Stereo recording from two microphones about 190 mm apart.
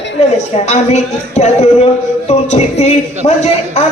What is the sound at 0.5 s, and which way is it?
A man's voice, 35° left (ahead or behind).